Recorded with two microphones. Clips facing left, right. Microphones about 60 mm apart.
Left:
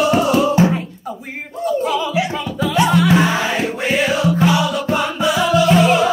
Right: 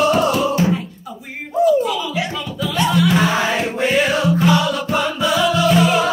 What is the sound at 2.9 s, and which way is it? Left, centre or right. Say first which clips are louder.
Music: even; left.